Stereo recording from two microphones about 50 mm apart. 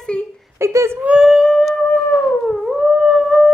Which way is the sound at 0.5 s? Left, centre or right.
Right.